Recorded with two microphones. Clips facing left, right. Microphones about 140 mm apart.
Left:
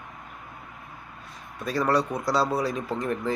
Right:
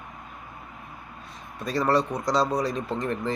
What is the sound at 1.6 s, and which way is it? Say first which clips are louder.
Speech: right 1 dB; centre (ahead or behind).